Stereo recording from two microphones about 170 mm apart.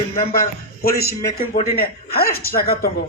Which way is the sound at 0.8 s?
65° left (ahead or behind).